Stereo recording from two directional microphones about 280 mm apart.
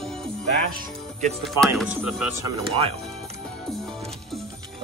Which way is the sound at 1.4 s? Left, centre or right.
Centre.